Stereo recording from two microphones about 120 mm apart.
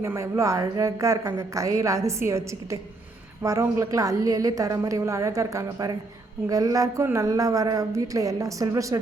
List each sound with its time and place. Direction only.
0.0 s a woman's voice: 25° right (ahead or behind)